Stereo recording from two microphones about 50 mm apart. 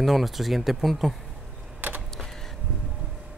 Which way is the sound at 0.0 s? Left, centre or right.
Centre.